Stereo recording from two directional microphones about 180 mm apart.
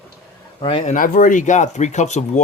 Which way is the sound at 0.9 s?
50° left (ahead or behind).